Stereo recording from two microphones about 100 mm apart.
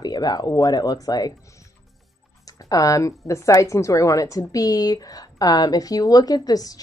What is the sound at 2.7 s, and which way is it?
A woman's voice, 35° left (ahead or behind).